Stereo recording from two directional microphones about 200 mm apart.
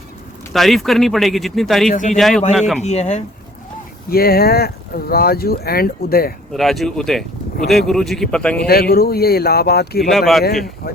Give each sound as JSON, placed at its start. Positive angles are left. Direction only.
{"t": 0.5, "sound": "speech", "side_deg": 0}
{"t": 1.9, "sound": "speech", "side_deg": 40}
{"t": 2.1, "sound": "speech", "side_deg": 0}
{"t": 2.8, "sound": "speech", "side_deg": 35}
{"t": 4.1, "sound": "speech", "side_deg": 50}
{"t": 6.5, "sound": "speech", "side_deg": 0}
{"t": 8.6, "sound": "speech", "side_deg": 50}
{"t": 10.1, "sound": "speech", "side_deg": 0}
{"t": 10.8, "sound": "a sound", "side_deg": 50}